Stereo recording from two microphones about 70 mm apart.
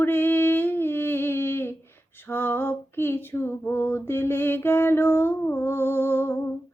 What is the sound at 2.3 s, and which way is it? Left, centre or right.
Female singing, left.